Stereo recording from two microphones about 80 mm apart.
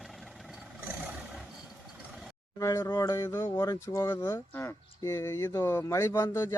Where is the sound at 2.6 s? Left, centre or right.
Left.